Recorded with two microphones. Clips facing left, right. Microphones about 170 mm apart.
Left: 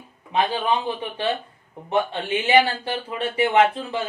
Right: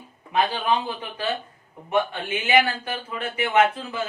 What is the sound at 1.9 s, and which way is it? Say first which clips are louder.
Speech: left 1 dB; 30° left (ahead or behind).